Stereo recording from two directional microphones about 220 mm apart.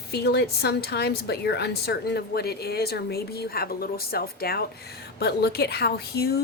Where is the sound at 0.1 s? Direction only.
45° left (ahead or behind).